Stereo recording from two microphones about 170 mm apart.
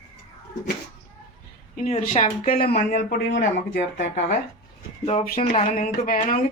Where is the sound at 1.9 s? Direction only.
45° left (ahead or behind).